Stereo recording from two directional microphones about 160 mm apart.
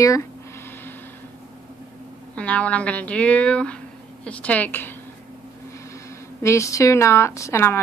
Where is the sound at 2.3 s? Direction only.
10° left (ahead or behind).